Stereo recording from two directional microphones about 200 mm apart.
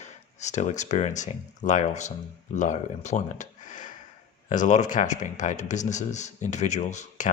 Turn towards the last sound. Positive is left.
turn(degrees=40)  # may be behind; listen again after turning